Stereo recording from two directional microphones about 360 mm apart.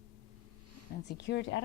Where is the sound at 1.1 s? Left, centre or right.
Left.